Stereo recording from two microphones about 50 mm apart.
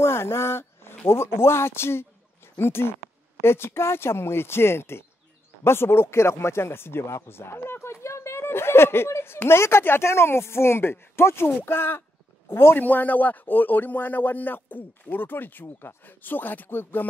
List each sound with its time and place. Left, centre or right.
0.0 s speech: left
12.8 s speech: left
15.6 s speech: left
16.0 s speech: left